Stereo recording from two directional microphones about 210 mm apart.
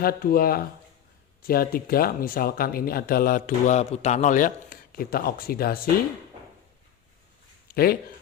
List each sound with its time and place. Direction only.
0.0 s speech: 45° left (ahead or behind)
7.7 s speech: 45° left (ahead or behind)